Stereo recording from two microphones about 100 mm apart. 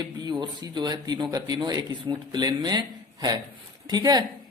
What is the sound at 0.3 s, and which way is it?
A man's voice, 45° right (ahead or behind).